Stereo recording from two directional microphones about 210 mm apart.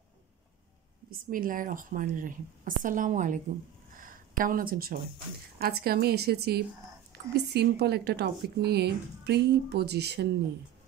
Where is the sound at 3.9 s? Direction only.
40° right (ahead or behind).